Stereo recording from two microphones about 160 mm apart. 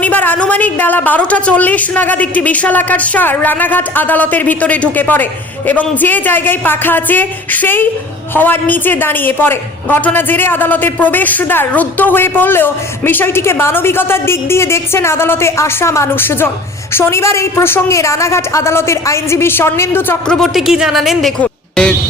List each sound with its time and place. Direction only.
0.0 s a woman's voice: 10° left (ahead or behind)
20.4 s a woman's voice: centre (ahead or behind)